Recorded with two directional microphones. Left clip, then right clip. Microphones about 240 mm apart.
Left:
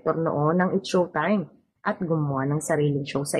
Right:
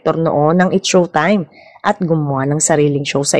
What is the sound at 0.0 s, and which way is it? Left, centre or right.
A woman's voice, right.